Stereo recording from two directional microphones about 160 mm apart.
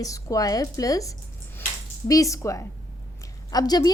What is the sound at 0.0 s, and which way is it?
A woman's voice, 20° left (ahead or behind).